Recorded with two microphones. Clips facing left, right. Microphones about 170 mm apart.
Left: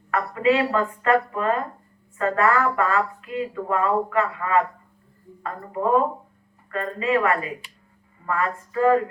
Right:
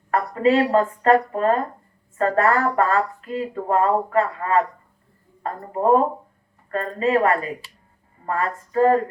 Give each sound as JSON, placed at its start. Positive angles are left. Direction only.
{"t": 0.1, "sound": "speech", "side_deg": -40}